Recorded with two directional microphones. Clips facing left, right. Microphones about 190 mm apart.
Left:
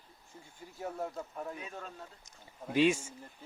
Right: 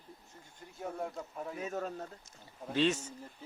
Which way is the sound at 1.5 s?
45° right (ahead or behind).